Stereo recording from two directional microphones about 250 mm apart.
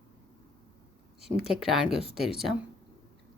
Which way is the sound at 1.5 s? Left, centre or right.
Centre.